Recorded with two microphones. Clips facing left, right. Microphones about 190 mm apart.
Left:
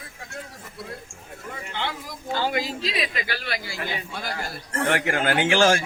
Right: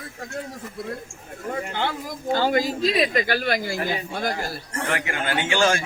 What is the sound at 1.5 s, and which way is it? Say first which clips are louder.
Speech: right 5 dB; 45° right (ahead or behind).